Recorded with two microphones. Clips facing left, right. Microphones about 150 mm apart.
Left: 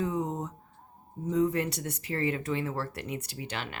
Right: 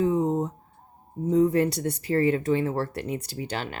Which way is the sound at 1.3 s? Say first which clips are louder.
Right 6 dB; 35° right (ahead or behind).